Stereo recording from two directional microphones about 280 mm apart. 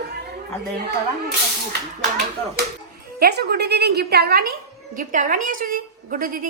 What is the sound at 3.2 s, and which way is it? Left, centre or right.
A woman's voice, right.